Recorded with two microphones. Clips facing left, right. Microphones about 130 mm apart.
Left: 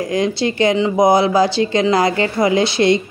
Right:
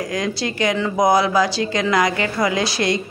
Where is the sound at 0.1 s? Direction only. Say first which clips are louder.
Left 6 dB; 25° left (ahead or behind).